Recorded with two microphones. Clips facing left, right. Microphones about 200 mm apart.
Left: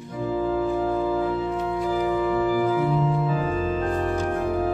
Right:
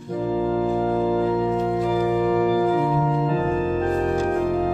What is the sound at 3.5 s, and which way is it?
Music, 50° right (ahead or behind).